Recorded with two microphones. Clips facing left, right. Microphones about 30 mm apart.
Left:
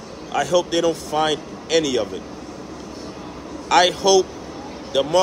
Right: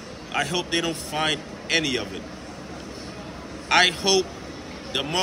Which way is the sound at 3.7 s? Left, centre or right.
Centre.